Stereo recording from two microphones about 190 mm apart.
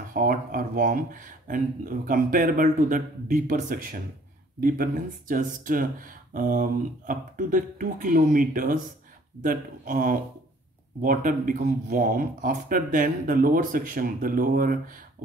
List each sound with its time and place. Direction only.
0.1 s speech: 45° right (ahead or behind)